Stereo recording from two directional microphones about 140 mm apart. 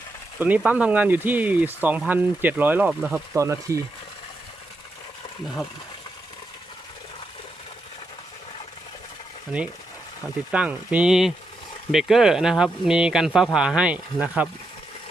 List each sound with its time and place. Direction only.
0.3 s speech: 10° right (ahead or behind)
3.3 s speech: 20° right (ahead or behind)
10.5 s speech: 10° right (ahead or behind)